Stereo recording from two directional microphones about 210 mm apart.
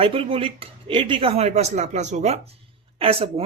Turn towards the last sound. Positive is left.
turn(degrees=-25)  # may be behind; listen again after turning